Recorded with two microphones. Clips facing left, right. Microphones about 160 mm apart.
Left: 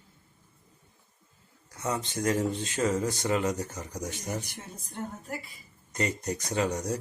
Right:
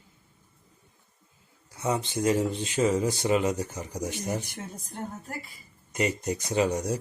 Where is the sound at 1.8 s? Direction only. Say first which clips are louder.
Right 3 dB; 20° right (ahead or behind).